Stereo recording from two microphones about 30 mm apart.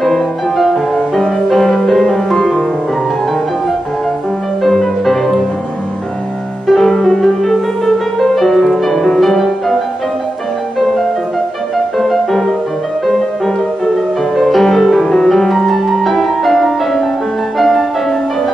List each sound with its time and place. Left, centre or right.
5.0 s music: centre
6.7 s music: centre
7.0 s music: centre
12.0 s music: centre
14.3 s music: centre